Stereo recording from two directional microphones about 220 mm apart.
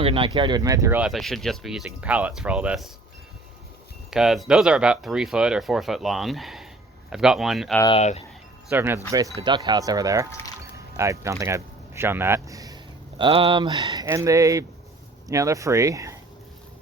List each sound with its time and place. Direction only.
0.0 s speech: 25° right (ahead or behind); by 2.9 s 5° right (ahead or behind)
4.1 s speech: centre (ahead or behind)
7.8 s speech: 25° left (ahead or behind)
8.7 s speech: 10° right (ahead or behind)
9.4 s speech: 20° right (ahead or behind)